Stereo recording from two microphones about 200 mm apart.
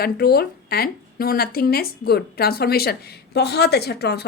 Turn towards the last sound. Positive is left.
turn(degrees=55)  # may be behind; listen again after turning